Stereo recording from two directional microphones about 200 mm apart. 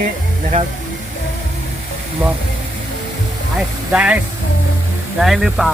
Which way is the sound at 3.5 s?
5° right (ahead or behind).